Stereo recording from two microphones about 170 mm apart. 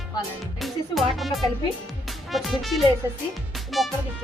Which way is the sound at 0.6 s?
Centre (ahead or behind).